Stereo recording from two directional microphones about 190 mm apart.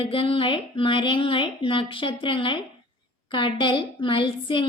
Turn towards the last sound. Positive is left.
turn(degrees=30)  # may be behind; listen again after turning